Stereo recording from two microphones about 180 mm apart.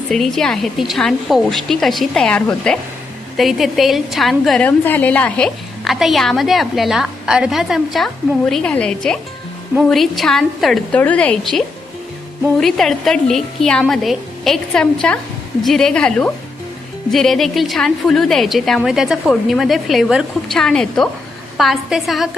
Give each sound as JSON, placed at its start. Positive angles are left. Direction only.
{"t": 0.1, "sound": "a woman's voice", "side_deg": 0}